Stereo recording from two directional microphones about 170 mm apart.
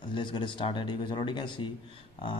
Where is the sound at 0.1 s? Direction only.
30° left (ahead or behind).